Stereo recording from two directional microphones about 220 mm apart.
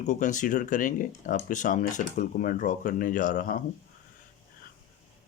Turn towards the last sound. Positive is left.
turn(degrees=35)  # may be behind; listen again after turning